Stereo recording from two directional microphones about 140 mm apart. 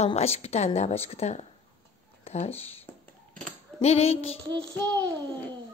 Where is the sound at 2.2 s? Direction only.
50° left (ahead or behind).